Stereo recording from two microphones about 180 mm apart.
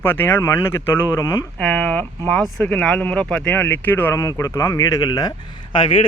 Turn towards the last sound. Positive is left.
turn(degrees=30)  # may be behind; listen again after turning